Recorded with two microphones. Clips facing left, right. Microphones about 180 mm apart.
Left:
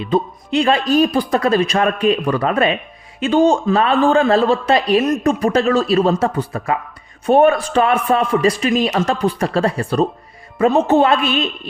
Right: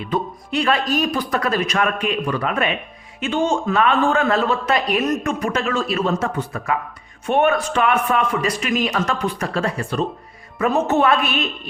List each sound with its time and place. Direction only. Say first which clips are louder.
0.0 s a man's voice: left 5 dB; 25° left (ahead or behind)